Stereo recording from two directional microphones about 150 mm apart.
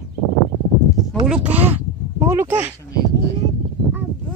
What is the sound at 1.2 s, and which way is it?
Speech, 5° right (ahead or behind).